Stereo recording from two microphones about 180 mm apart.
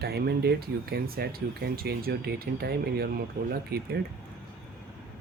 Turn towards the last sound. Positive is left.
turn(degrees=-60)  # may be behind; listen again after turning